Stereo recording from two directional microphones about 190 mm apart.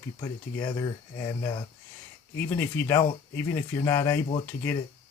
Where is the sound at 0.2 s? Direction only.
15° left (ahead or behind).